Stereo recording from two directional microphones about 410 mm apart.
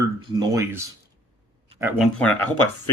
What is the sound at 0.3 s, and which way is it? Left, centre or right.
Speech, centre.